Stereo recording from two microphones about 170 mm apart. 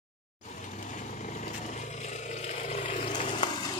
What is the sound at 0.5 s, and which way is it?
Vehicle, 45° left (ahead or behind).